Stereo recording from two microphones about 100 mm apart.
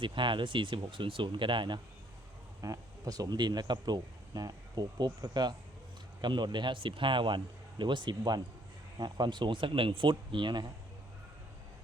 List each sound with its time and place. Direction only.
0.0 s speech: 55° right (ahead or behind)
2.6 s speech: 35° right (ahead or behind); by 10.7 s 50° right (ahead or behind)